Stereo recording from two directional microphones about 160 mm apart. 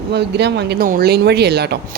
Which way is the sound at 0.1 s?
90° right.